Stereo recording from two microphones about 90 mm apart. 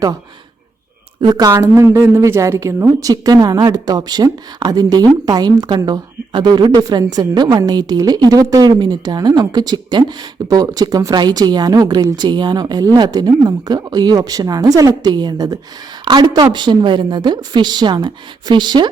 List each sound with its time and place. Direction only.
1.2 s a woman's voice: 45° right (ahead or behind)
3.0 s speech: 45° right (ahead or behind)
8.8 s speech: 50° right (ahead or behind)
16.0 s a woman's voice: 60° right (ahead or behind)